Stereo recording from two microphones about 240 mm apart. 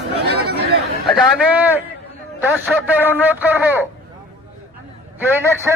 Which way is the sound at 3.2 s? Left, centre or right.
Centre.